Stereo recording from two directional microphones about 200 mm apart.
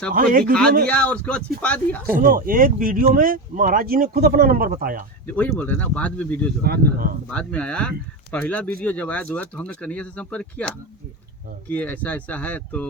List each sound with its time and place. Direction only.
0.1 s speech: 45° right (ahead or behind)
0.9 s speech: 5° left (ahead or behind)
2.1 s speech: 45° right (ahead or behind)
5.2 s speech: 10° left (ahead or behind)
6.6 s speech: 50° right (ahead or behind)
7.3 s speech: 5° left (ahead or behind)